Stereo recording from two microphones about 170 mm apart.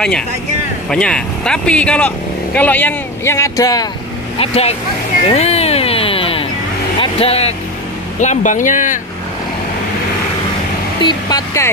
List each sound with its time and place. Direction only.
0.8 s speech: 5° left (ahead or behind); by 3.8 s 20° left (ahead or behind)
4.4 s speech: 35° left (ahead or behind)
7.0 s music: 35° left (ahead or behind)
8.2 s speech: 45° left (ahead or behind)
11.0 s speech: 25° left (ahead or behind)